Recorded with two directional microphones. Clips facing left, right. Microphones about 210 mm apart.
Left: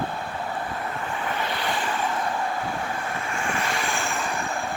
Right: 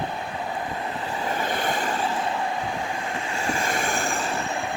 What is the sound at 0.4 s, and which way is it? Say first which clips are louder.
Vehicle: right 1 dB; 15° right (ahead or behind).